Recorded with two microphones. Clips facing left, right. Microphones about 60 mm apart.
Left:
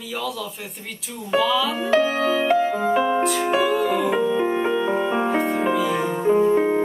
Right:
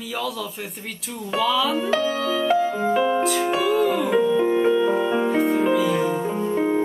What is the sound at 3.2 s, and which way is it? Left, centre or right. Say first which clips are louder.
Music: even; centre.